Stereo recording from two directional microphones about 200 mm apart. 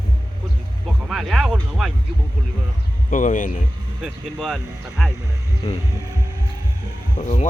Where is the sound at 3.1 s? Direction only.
40° left (ahead or behind).